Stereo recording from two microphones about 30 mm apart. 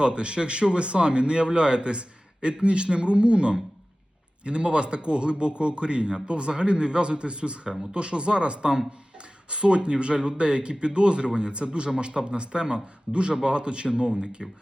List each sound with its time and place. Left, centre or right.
0.0 s a man's voice: right
14.4 s speech: centre